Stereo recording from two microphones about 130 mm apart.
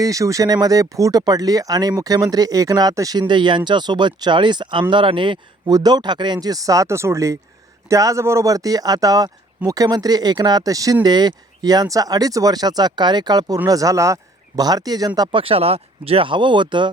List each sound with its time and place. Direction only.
0.0 s speech: 25° right (ahead or behind)
15.4 s speech: 45° right (ahead or behind)